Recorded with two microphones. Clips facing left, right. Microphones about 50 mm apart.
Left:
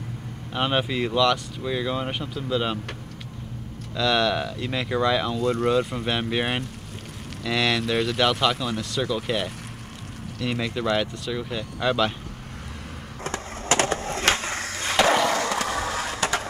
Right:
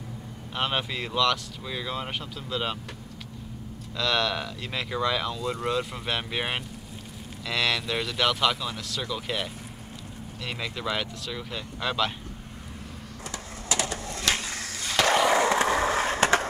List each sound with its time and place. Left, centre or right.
0.5 s speech: centre
3.9 s speech: centre
13.2 s skateboard: left
15.1 s skateboard: centre; by 16.4 s right